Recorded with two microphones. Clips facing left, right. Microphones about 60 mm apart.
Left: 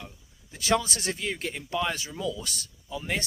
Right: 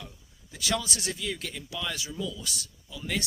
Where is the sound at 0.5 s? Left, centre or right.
Left.